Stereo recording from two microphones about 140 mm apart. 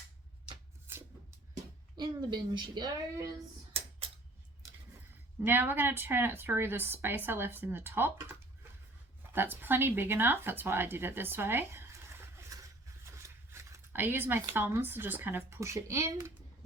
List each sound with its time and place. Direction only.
2.0 s speech: 30° right (ahead or behind)
3.7 s a sound: 45° right (ahead or behind)
5.5 s speech: 15° right (ahead or behind)